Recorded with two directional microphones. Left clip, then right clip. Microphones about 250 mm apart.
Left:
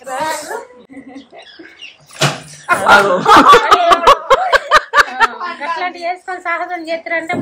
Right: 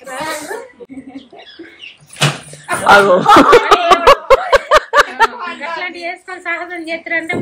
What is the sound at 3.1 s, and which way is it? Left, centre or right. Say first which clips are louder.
Snicker: even; centre.